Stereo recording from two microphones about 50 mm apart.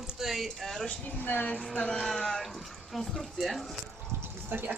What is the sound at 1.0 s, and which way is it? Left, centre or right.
Speech, left.